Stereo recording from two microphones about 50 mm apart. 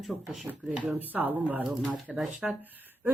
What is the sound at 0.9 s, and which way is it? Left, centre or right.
Speech, right.